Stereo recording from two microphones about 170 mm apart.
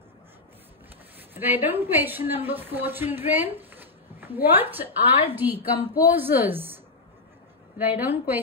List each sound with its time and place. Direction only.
1.3 s a woman's voice: 10° right (ahead or behind)